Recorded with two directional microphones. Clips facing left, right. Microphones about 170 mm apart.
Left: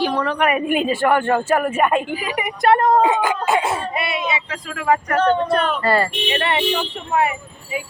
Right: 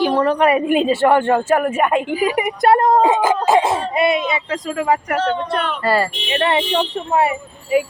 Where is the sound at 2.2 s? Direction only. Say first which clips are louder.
Right 3 dB; 40° right (ahead or behind).